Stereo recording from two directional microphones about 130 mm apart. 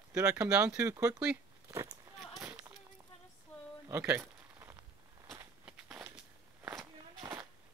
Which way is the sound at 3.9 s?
15° right (ahead or behind).